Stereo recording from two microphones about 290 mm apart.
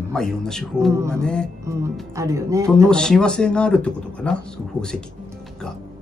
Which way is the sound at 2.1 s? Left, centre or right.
Centre.